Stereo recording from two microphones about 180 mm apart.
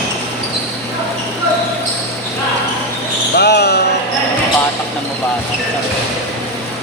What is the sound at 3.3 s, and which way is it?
Basketball bounce, 65° left (ahead or behind).